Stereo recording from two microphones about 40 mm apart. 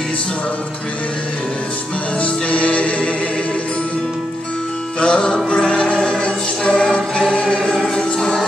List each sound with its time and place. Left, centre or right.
2.2 s music: left
5.0 s music: left
7.7 s music: centre